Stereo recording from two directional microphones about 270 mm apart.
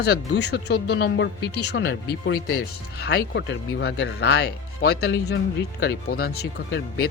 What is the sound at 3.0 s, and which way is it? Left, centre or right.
Speech, left.